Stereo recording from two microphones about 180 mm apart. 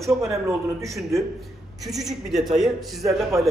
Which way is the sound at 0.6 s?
15° right (ahead or behind).